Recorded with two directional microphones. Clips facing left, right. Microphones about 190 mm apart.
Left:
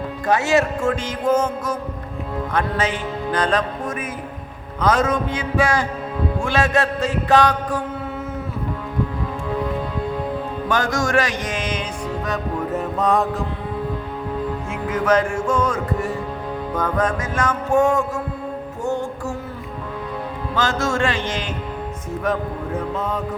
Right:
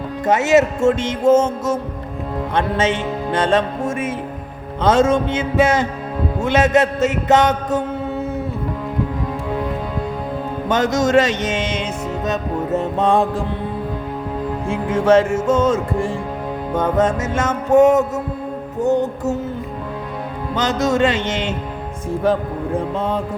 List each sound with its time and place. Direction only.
0.3 s music: 20° right (ahead or behind)
10.7 s music: 20° right (ahead or behind)
14.7 s music: 30° right (ahead or behind)
20.6 s music: 20° right (ahead or behind)